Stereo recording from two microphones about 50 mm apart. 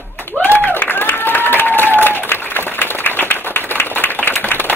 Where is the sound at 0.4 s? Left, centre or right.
Left.